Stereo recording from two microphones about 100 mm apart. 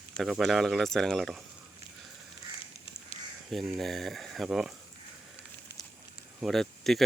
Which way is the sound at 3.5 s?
Centre (ahead or behind).